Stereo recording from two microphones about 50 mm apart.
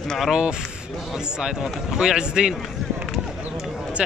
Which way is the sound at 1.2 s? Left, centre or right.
Centre.